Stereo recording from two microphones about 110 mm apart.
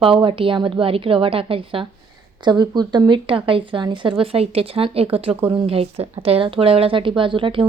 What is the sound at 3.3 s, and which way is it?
Speech, 55° right (ahead or behind).